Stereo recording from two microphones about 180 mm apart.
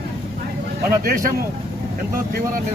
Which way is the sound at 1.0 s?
50° right (ahead or behind).